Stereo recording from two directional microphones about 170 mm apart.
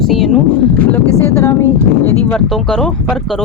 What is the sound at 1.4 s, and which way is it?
Speech, 15° left (ahead or behind).